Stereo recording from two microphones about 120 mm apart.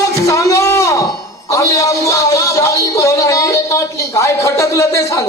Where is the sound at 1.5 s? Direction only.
25° left (ahead or behind).